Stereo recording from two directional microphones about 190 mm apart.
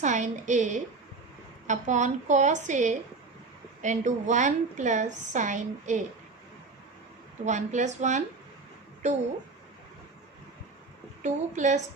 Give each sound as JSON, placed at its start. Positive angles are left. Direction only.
{"t": 0.0, "sound": "a woman's voice", "side_deg": -40}
{"t": 7.4, "sound": "a woman's voice", "side_deg": -40}
{"t": 11.2, "sound": "a woman's voice", "side_deg": -40}